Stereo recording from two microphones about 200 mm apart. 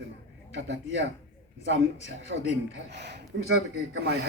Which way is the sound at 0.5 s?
65° right (ahead or behind).